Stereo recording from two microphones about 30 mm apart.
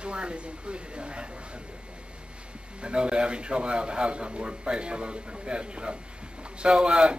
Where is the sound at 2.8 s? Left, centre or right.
Right.